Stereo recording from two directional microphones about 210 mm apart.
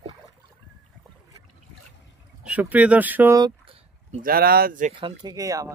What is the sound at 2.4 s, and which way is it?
Speech, 5° right (ahead or behind).